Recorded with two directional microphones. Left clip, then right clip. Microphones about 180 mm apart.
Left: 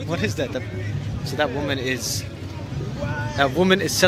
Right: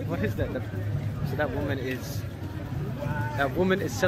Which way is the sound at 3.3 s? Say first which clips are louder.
Left 7 dB; 20° left (ahead or behind).